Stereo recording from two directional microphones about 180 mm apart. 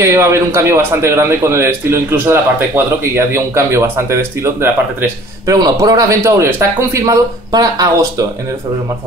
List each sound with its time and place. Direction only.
0.0 s a man's voice: 15° right (ahead or behind)